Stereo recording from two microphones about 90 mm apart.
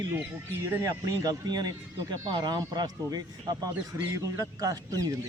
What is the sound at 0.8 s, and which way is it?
Speech, 40° right (ahead or behind).